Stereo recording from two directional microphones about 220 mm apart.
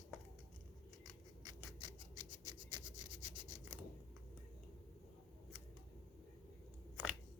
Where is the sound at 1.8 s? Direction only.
20° right (ahead or behind).